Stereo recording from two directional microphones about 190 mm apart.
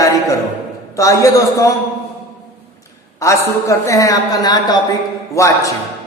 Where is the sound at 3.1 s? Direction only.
15° left (ahead or behind).